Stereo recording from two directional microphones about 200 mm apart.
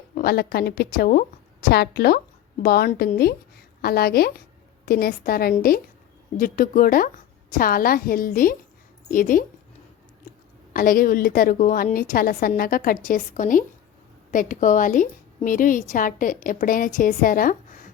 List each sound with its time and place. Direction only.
0.1 s a woman's voice: 50° left (ahead or behind)
10.3 s a sound: 45° left (ahead or behind)
10.7 s a woman's voice: 45° left (ahead or behind)